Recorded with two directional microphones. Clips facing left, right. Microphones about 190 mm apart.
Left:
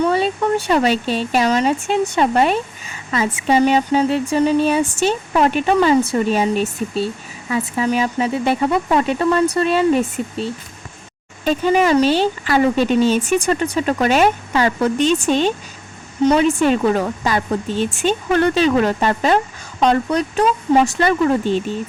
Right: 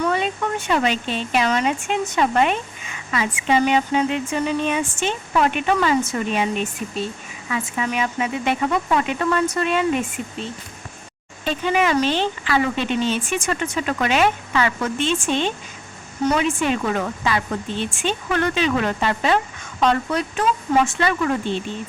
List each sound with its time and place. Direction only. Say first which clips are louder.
0.0 s speech: left 5 dB; 30° left (ahead or behind)